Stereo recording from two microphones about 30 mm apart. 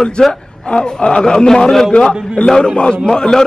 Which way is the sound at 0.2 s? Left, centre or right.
Left.